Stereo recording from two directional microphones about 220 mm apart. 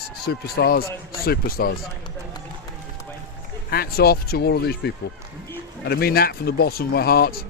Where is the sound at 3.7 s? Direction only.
45° left (ahead or behind).